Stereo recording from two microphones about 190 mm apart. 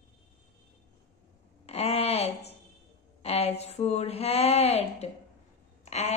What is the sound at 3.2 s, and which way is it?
Speech, 30° left (ahead or behind).